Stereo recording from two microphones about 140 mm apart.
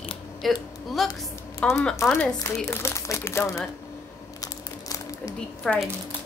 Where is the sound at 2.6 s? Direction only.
20° left (ahead or behind).